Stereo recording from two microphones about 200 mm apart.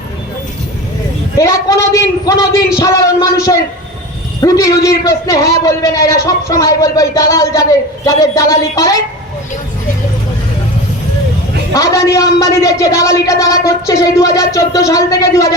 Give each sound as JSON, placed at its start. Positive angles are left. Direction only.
{"t": 1.4, "sound": "a man's voice", "side_deg": 15}
{"t": 11.7, "sound": "a man's voice", "side_deg": 15}